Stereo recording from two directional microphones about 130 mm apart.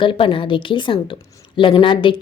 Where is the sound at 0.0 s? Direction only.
40° left (ahead or behind).